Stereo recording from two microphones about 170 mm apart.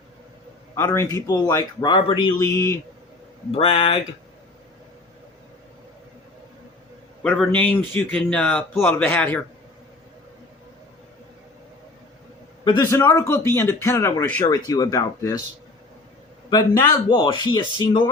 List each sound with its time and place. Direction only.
0.8 s speech: 15° left (ahead or behind)
3.5 s speech: 30° left (ahead or behind)
7.2 s a man's voice: 5° left (ahead or behind)
13.0 s a man's voice: 15° left (ahead or behind)
16.5 s speech: 25° left (ahead or behind)